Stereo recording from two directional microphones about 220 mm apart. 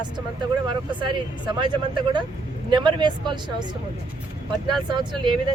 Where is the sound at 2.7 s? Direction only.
20° right (ahead or behind).